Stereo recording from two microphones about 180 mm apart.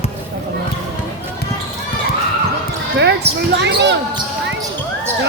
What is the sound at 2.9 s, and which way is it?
Basketball bounce, 70° right (ahead or behind).